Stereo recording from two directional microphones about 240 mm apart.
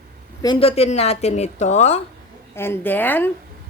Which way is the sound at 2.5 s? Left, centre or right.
Centre.